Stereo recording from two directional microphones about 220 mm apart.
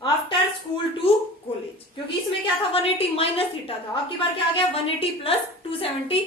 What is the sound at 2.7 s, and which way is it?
A woman's voice, 25° left (ahead or behind).